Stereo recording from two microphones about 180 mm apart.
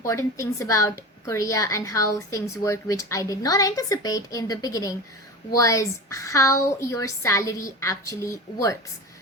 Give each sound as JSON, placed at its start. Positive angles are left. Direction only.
{"t": 0.0, "sound": "a woman's voice", "side_deg": 15}